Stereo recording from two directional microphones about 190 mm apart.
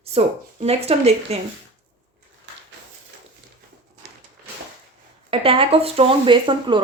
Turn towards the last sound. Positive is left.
turn(degrees=-25)  # may be behind; listen again after turning